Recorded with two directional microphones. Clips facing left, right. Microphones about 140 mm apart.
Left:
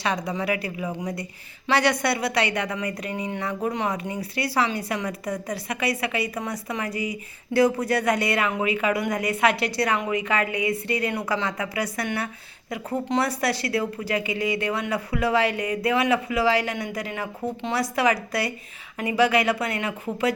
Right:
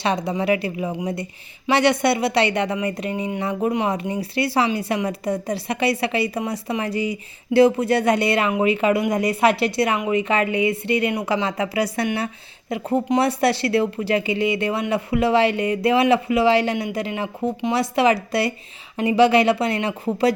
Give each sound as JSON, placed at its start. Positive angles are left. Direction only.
{"t": 0.0, "sound": "speech", "side_deg": -25}